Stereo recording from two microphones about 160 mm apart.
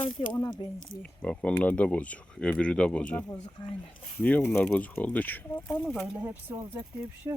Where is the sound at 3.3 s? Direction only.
25° left (ahead or behind).